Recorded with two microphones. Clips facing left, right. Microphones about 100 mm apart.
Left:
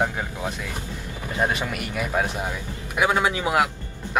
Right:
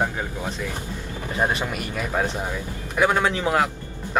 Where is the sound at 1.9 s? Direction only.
10° left (ahead or behind).